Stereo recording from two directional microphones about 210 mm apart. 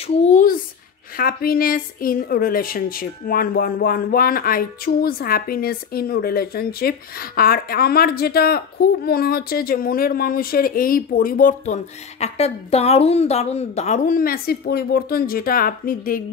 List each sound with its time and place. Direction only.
0.0 s speech: 30° left (ahead or behind)